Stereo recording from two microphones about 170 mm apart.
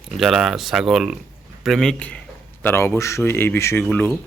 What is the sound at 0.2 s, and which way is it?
Speech, centre (ahead or behind).